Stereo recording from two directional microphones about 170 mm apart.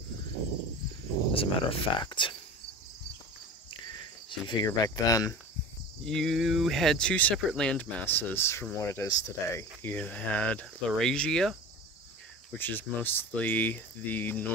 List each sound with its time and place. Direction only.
1.3 s speech: 35° left (ahead or behind)
3.9 s cricket: 25° left (ahead or behind)
6.0 s speech: centre (ahead or behind)
12.5 s speech: 10° left (ahead or behind)